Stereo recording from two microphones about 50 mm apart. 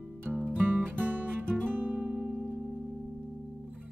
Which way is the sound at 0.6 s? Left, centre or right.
Right.